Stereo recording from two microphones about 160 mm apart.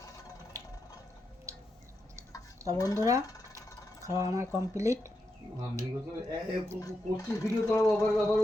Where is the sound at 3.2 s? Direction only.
20° left (ahead or behind).